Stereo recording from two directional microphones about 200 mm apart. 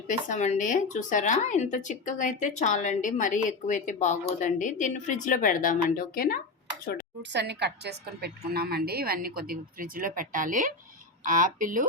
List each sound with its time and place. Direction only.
0.3 s speech: 40° left (ahead or behind)
7.2 s a woman's voice: 60° right (ahead or behind); by 11.9 s 40° right (ahead or behind)